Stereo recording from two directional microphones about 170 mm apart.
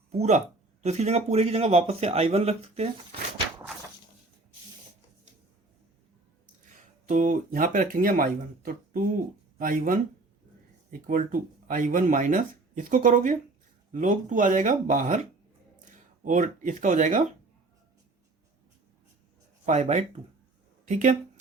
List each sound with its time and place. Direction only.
0.1 s speech: 40° right (ahead or behind)
7.1 s speech: 45° right (ahead or behind)
11.0 s speech: 55° right (ahead or behind)
19.6 s speech: 45° right (ahead or behind)